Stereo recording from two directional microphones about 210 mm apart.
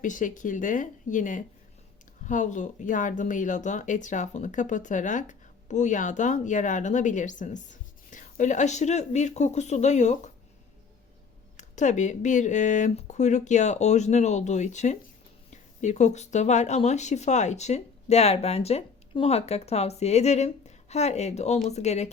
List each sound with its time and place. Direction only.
0.0 s speech: 40° left (ahead or behind)
11.5 s speech: 35° left (ahead or behind)